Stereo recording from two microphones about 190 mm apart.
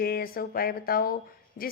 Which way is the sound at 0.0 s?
50° left (ahead or behind).